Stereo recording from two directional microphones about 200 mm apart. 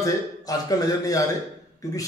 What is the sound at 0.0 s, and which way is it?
A man's voice, 15° left (ahead or behind).